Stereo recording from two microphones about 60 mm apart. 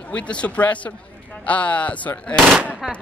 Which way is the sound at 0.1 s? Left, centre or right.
Left.